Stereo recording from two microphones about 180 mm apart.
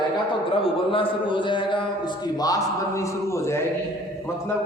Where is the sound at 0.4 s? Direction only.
30° left (ahead or behind).